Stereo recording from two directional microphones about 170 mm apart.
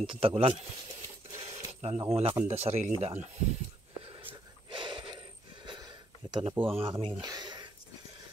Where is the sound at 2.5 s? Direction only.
40° right (ahead or behind).